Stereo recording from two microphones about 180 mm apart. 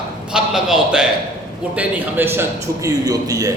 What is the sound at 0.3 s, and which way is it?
A man's voice, 5° right (ahead or behind).